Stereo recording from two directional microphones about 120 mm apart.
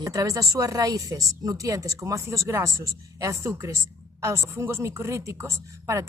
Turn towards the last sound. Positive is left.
turn(degrees=-25)  # may be behind; listen again after turning